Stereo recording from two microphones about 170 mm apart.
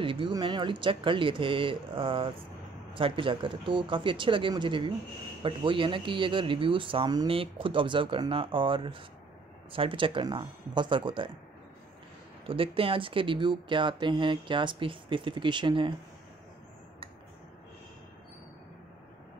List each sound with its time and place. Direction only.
0.0 s speech: 30° right (ahead or behind)
12.4 s speech: 35° right (ahead or behind)